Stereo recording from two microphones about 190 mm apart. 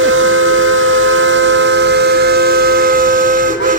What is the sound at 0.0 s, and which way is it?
Steam whistle, 90° right.